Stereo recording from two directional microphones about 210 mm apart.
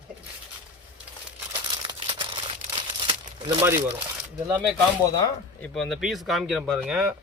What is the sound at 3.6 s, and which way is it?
Speech, 10° right (ahead or behind).